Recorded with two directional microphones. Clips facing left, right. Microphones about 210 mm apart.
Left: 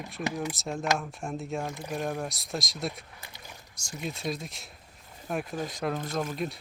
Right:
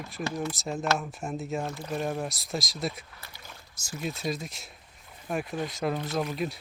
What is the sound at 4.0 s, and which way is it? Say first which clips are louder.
Speech: right 1 dB; centre (ahead or behind).